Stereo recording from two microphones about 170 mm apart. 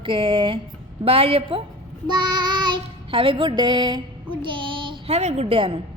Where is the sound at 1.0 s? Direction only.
35° right (ahead or behind).